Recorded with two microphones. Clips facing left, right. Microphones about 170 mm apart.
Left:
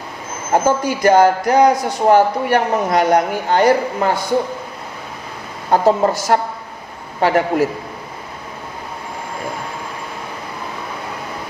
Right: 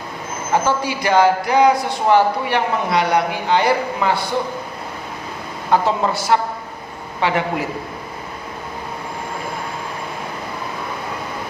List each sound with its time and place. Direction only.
0.5 s a man's voice: 45° left (ahead or behind)
5.7 s a man's voice: 45° left (ahead or behind)